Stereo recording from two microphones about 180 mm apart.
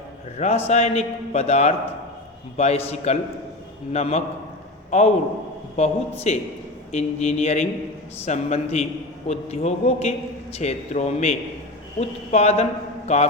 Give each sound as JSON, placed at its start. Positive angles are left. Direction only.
{"t": 0.3, "sound": "a man's voice", "side_deg": 35}